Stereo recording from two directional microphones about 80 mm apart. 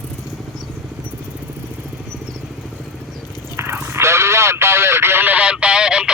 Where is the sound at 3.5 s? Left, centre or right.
Right.